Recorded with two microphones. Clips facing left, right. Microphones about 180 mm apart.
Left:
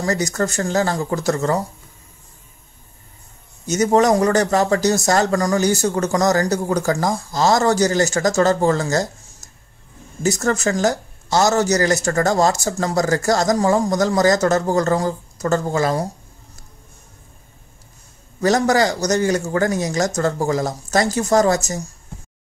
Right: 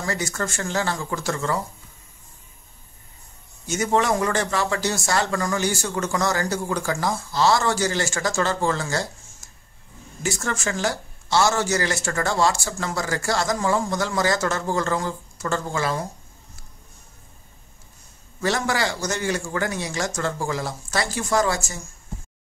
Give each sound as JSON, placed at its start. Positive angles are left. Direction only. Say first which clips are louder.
{"t": 0.0, "sound": "speech", "louder": "left 7 dB", "side_deg": 40}
{"t": 3.6, "sound": "speech", "louder": "left 6 dB", "side_deg": 40}
{"t": 10.2, "sound": "speech", "louder": "left 8 dB", "side_deg": 40}
{"t": 18.4, "sound": "speech", "louder": "left 8 dB", "side_deg": 40}